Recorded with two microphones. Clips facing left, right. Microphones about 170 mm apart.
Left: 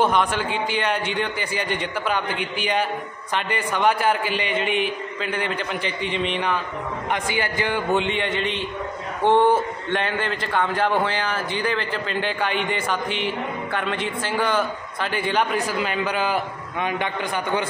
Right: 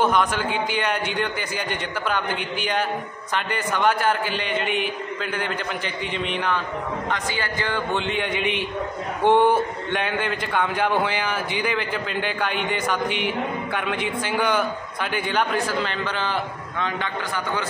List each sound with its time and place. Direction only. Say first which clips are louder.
0.0 s a man's voice: even; 5° right (ahead or behind)
7.1 s a man's voice: left 2 dB; 15° left (ahead or behind)
7.9 s a man's voice: left 3 dB; centre (ahead or behind); by 17.6 s 20° left (ahead or behind)